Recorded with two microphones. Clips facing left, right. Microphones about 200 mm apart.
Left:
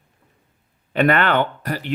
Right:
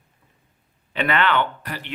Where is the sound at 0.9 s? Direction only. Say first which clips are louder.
Left 4 dB; 50° left (ahead or behind).